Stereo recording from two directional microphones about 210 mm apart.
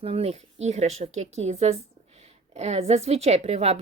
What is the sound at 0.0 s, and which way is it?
A woman's voice, 30° right (ahead or behind).